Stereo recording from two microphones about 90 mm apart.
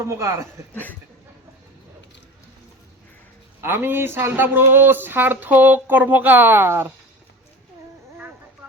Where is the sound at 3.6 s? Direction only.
25° right (ahead or behind).